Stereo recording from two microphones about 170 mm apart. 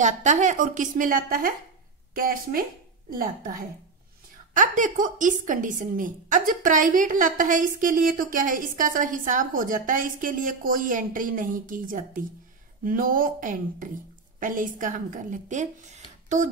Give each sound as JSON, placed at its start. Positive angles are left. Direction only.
{"t": 0.0, "sound": "a woman's voice", "side_deg": -45}